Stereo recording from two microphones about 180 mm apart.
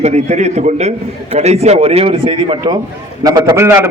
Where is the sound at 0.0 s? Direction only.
40° right (ahead or behind).